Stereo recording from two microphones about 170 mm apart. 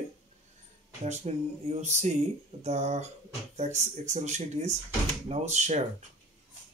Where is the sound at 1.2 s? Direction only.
40° right (ahead or behind).